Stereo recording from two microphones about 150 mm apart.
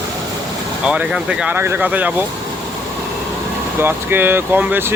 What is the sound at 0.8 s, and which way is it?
Speech, 5° right (ahead or behind).